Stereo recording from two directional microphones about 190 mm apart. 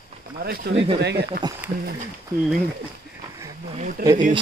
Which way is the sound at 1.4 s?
20° right (ahead or behind).